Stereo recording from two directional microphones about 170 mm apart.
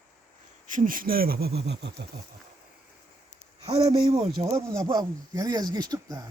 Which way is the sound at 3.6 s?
25° right (ahead or behind).